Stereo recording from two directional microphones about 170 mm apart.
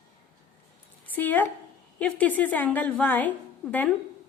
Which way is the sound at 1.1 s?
10° left (ahead or behind).